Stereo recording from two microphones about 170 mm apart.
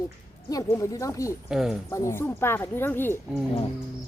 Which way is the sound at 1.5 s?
5° right (ahead or behind).